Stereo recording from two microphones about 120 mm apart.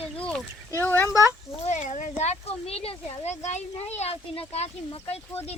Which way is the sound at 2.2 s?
60° left (ahead or behind).